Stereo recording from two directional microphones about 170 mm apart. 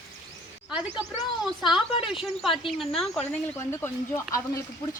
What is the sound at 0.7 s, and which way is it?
Speech, 5° right (ahead or behind).